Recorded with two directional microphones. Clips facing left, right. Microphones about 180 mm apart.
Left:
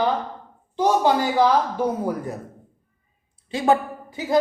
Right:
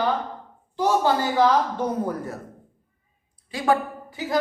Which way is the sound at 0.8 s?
15° left (ahead or behind).